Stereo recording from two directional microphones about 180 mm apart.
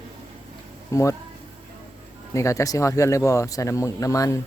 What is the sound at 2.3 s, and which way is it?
Speech, 15° left (ahead or behind).